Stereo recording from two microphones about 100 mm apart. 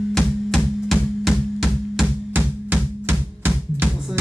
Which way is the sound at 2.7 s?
20° right (ahead or behind).